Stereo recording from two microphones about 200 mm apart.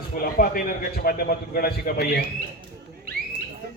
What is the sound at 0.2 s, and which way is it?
A man's voice, 45° left (ahead or behind).